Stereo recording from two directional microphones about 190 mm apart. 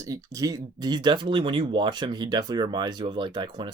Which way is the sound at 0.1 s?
15° right (ahead or behind).